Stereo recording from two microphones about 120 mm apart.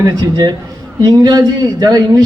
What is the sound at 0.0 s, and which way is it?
A man's voice, 35° right (ahead or behind).